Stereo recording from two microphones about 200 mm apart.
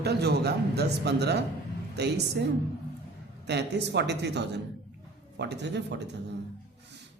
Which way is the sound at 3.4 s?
60° right (ahead or behind).